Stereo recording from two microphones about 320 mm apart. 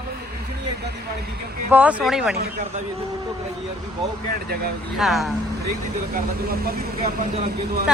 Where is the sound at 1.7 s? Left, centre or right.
Centre.